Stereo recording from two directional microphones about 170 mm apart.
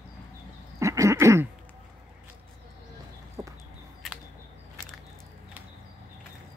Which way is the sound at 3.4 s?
10° right (ahead or behind).